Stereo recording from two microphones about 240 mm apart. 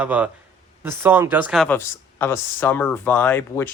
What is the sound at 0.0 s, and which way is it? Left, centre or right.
A man's voice, centre.